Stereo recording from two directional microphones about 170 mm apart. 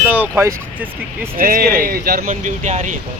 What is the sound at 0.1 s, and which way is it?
Speech, 10° right (ahead or behind).